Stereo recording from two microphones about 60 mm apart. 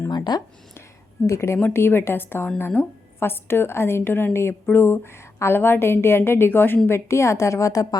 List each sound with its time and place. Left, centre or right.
1.3 s a woman's voice: left
6.8 s a woman's voice: left